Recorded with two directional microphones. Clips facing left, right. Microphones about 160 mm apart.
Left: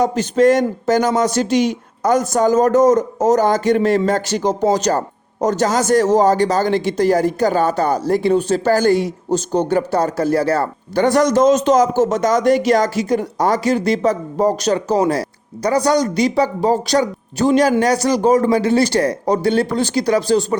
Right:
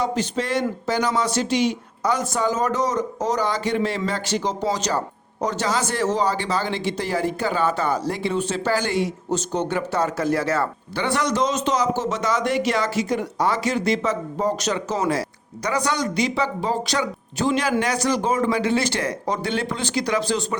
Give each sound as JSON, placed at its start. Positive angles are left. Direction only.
{"t": 0.0, "sound": "speech", "side_deg": 45}